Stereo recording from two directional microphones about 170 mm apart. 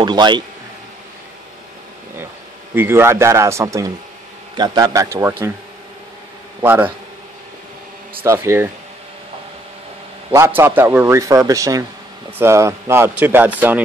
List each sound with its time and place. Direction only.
0.0 s a man's voice: 25° right (ahead or behind)
2.7 s a man's voice: 15° right (ahead or behind)
6.6 s a man's voice: 10° right (ahead or behind)
8.2 s a man's voice: 15° right (ahead or behind)
10.3 s a man's voice: 15° right (ahead or behind)